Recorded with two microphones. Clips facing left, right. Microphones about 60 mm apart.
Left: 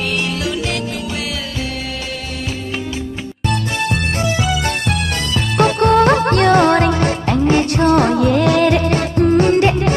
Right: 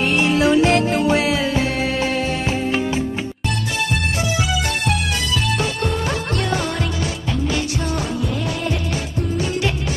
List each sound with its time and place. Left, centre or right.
0.2 s music: right
5.5 s music: left
7.4 s music: left
7.9 s music: left